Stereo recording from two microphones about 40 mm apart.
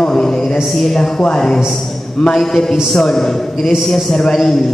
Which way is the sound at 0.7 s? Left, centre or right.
Centre.